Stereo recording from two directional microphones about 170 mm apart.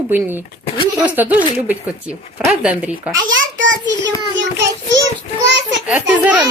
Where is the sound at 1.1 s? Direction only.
10° right (ahead or behind).